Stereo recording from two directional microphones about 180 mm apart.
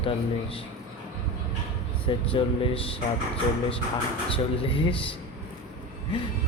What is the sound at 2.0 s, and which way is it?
Speech, 30° left (ahead or behind).